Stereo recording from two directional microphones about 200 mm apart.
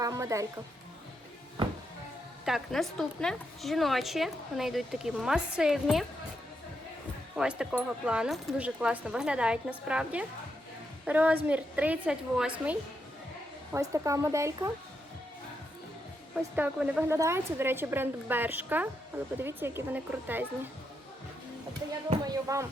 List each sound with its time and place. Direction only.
0.0 s music: 15° right (ahead or behind)
2.4 s a woman's voice: centre (ahead or behind)
7.3 s a woman's voice: 5° right (ahead or behind)
13.7 s a woman's voice: 15° right (ahead or behind)
16.3 s a woman's voice: 5° right (ahead or behind)
22.2 s a woman's voice: 15° right (ahead or behind)